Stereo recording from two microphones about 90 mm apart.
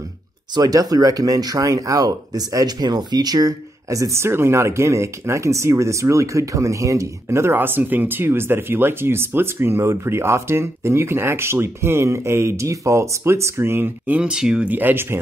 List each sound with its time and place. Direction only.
0.6 s speech: 40° right (ahead or behind); by 15.1 s 25° right (ahead or behind)